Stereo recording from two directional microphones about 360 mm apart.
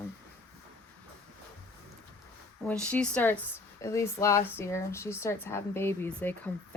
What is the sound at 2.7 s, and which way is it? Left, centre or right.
Speech, centre.